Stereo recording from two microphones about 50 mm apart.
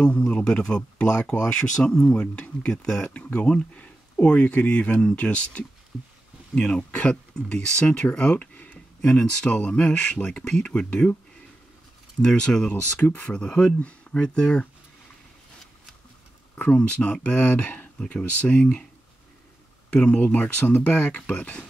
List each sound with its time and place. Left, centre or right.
0.0 s speech: left
3.1 s speech: left
12.2 s speech: centre
12.6 s speech: left
13.3 s speech: centre
16.5 s speech: left
19.9 s speech: left